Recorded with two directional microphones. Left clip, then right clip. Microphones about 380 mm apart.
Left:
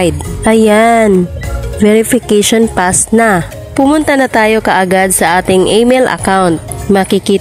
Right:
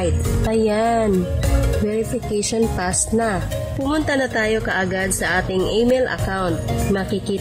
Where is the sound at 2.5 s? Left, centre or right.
Centre.